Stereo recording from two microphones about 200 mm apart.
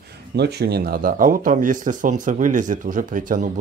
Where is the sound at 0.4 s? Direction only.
55° right (ahead or behind).